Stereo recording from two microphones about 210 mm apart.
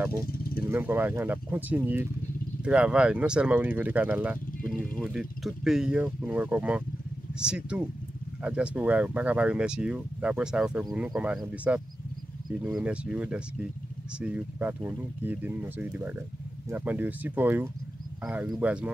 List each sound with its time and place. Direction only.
0.3 s vehicle: 45° left (ahead or behind)
0.7 s speech: 10° right (ahead or behind)